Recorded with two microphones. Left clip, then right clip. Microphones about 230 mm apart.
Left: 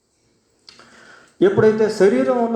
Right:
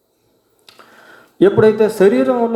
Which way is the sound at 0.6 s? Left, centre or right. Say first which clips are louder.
Right 2 dB; right.